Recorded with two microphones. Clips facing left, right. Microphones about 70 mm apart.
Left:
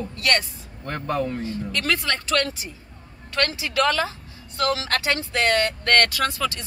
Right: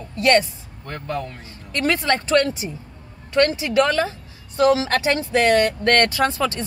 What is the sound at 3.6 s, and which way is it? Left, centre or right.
Speech, right.